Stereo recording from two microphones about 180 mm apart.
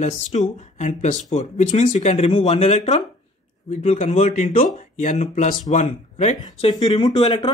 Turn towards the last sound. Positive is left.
turn(degrees=30)  # may be behind; listen again after turning